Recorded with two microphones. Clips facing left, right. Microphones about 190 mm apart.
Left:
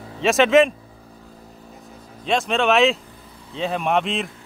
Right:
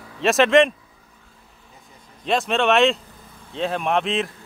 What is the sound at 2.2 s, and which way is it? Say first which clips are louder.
A man's voice: even; centre (ahead or behind).